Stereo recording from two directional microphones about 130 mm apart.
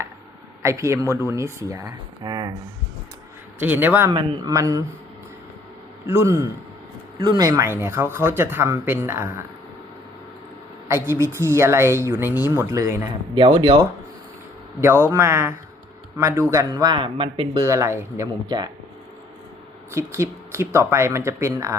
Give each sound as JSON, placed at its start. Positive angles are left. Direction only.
{"t": 0.6, "sound": "speech", "side_deg": -20}
{"t": 3.6, "sound": "speech", "side_deg": -15}
{"t": 4.1, "sound": "speech", "side_deg": -35}
{"t": 4.5, "sound": "speech", "side_deg": -25}
{"t": 6.1, "sound": "speech", "side_deg": -25}
{"t": 10.8, "sound": "speech", "side_deg": -20}
{"t": 13.3, "sound": "speech", "side_deg": -40}
{"t": 14.8, "sound": "speech", "side_deg": -20}
{"t": 16.9, "sound": "speech", "side_deg": -40}
{"t": 17.6, "sound": "speech", "side_deg": -25}
{"t": 18.4, "sound": "speech", "side_deg": -35}
{"t": 19.9, "sound": "speech", "side_deg": -20}